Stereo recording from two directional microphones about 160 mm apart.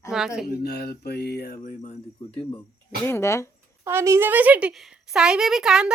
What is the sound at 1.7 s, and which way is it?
Speech, 45° left (ahead or behind).